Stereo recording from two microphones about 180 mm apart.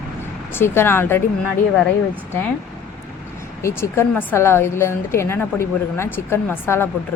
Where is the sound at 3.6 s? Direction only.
15° left (ahead or behind).